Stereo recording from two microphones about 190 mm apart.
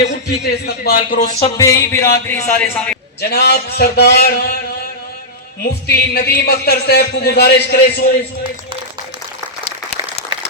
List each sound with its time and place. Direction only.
0.0 s speech: 60° left (ahead or behind); by 1.5 s 40° left (ahead or behind)
1.5 s speech: 15° left (ahead or behind)
3.2 s a man's voice: 60° left (ahead or behind)
5.6 s a man's voice: 55° left (ahead or behind)